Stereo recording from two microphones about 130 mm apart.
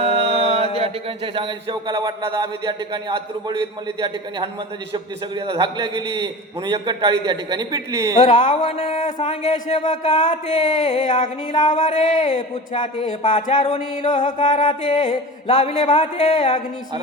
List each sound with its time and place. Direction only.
0.0 s speech: 45° right (ahead or behind)
4.9 s a man's voice: 35° right (ahead or behind)
8.2 s speech: 45° left (ahead or behind)
10.2 s a sound: 70° left (ahead or behind)
11.7 s speech: 65° left (ahead or behind)
14.1 s a sound: 70° left (ahead or behind)
14.9 s speech: 60° left (ahead or behind)